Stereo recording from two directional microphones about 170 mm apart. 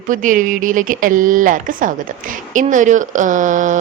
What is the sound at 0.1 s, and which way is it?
Speech, 50° right (ahead or behind).